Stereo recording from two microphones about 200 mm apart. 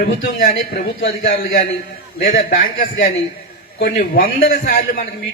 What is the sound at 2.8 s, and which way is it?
A man's voice, 40° left (ahead or behind).